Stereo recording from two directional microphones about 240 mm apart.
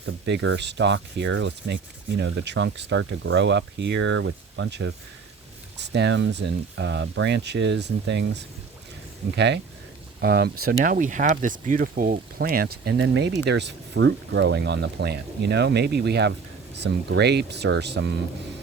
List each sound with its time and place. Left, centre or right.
0.0 s speech: right